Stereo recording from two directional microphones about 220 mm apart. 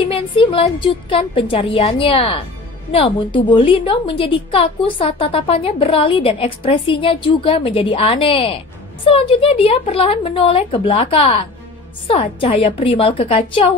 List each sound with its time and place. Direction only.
0.0 s a woman's voice: 25° left (ahead or behind)